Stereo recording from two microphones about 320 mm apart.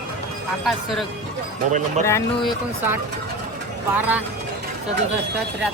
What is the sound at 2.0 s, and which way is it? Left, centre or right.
Speech, centre.